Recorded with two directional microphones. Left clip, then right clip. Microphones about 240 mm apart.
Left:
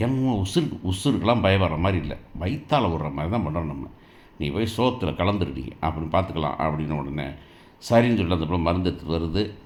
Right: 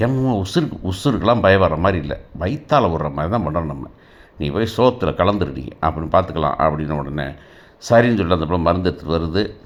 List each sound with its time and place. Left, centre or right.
0.0 s speech: centre